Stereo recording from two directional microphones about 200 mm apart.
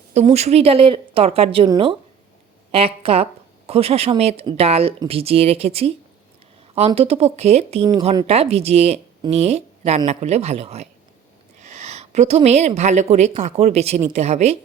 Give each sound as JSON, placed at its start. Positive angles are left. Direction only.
{"t": 0.3, "sound": "speech", "side_deg": -30}